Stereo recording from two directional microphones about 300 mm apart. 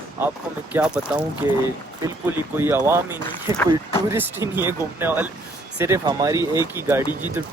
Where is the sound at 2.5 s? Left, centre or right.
Centre.